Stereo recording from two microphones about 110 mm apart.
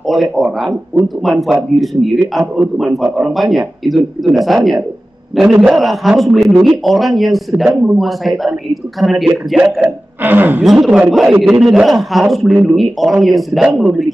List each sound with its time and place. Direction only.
0.0 s speech: centre (ahead or behind)
9.8 s speech: 15° right (ahead or behind)
10.6 s speech: centre (ahead or behind)